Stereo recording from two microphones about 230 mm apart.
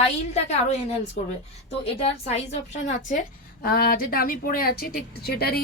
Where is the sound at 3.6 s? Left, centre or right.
Left.